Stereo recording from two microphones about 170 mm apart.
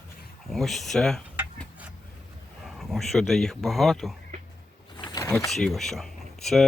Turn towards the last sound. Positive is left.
turn(degrees=0)  # may be behind; listen again after turning